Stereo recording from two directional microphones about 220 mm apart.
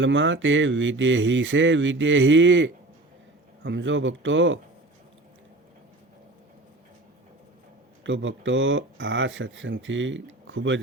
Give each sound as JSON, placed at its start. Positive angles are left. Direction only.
{"t": 0.0, "sound": "speech", "side_deg": -55}
{"t": 8.0, "sound": "speech", "side_deg": -60}